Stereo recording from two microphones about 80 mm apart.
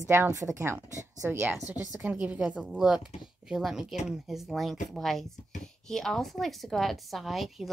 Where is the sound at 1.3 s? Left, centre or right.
Right.